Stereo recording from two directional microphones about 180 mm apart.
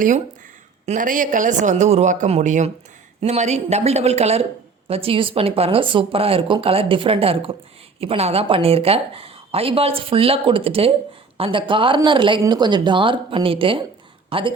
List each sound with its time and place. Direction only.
0.9 s a man's voice: 45° right (ahead or behind); by 14.5 s 30° right (ahead or behind)